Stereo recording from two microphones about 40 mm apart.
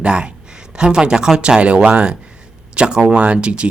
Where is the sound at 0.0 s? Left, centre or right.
Right.